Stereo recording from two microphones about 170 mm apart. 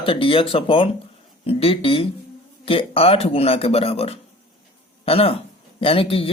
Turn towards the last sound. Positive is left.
turn(degrees=35)  # may be behind; listen again after turning